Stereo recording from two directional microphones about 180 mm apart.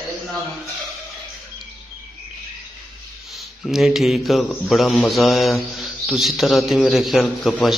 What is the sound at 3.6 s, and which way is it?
Speech, centre (ahead or behind).